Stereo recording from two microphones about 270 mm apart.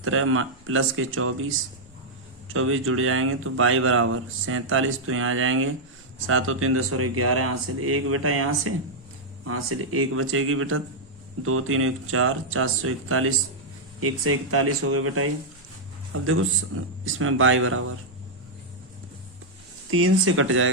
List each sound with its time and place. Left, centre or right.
0.0 s speech: right
19.9 s speech: right